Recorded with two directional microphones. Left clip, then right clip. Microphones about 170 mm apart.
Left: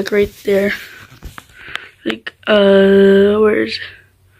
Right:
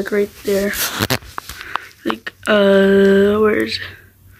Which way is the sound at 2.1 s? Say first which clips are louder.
Left 2 dB; 5° right (ahead or behind).